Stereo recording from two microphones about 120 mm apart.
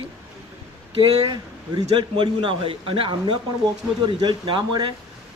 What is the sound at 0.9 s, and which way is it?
A man's voice, 40° right (ahead or behind).